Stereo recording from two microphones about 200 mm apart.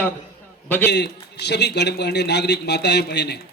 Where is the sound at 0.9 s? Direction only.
55° left (ahead or behind).